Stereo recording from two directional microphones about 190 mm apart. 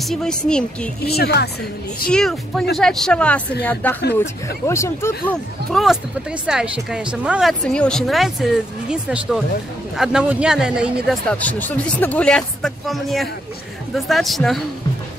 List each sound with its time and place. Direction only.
0.0 s speech: centre (ahead or behind)
1.0 s speech: 55° left (ahead or behind)
2.0 s speech: 5° left (ahead or behind)
11.1 s speech: 5° left (ahead or behind)